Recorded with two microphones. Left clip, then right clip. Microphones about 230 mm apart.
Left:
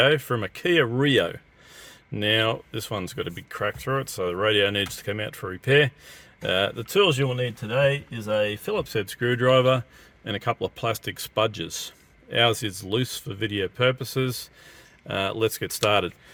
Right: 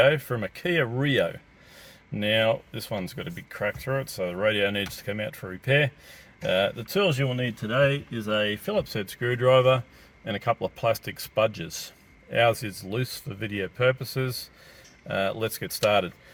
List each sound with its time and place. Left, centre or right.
0.0 s speech: left